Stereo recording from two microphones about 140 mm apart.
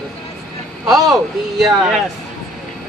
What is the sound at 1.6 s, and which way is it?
Speech, centre (ahead or behind).